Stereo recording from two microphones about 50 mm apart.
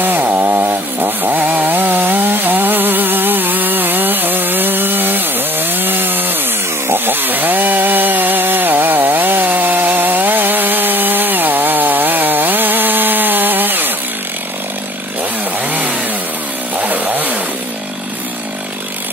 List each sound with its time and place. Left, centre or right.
0.0 s chainsaw: right
16.7 s chainsaw: right